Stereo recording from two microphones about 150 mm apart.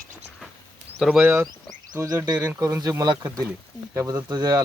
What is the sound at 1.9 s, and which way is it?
Speech, 20° right (ahead or behind).